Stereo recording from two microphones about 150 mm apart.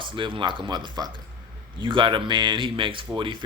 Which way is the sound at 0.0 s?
35° right (ahead or behind).